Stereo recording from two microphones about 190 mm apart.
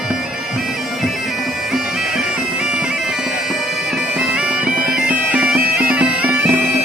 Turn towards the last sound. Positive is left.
turn(degrees=-5)  # may be behind; listen again after turning